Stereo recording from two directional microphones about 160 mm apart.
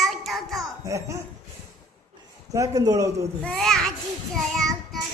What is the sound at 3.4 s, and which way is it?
Child singing, 5° left (ahead or behind).